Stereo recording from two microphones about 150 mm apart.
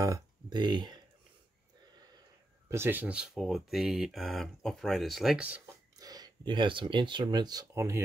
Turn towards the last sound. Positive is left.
turn(degrees=-20)  # may be behind; listen again after turning